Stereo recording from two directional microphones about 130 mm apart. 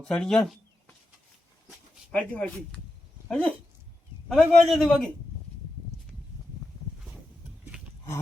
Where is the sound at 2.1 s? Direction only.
10° left (ahead or behind).